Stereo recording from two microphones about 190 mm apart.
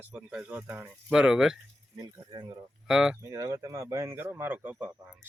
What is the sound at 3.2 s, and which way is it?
Speech, 15° right (ahead or behind).